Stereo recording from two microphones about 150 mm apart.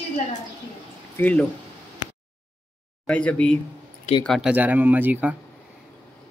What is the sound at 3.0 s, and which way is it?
Speech, 10° left (ahead or behind).